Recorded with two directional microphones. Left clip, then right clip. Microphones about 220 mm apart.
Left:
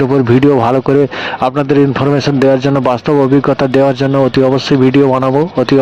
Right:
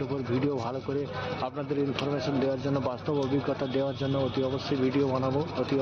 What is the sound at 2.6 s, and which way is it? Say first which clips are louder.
Speech: left 18 dB; 50° left (ahead or behind).